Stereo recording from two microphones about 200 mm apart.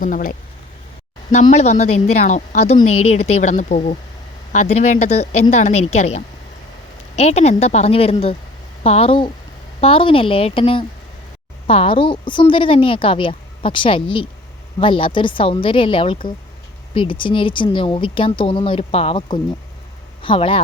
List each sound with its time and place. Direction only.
0.0 s a woman's voice: 45° left (ahead or behind); by 20.6 s 25° left (ahead or behind)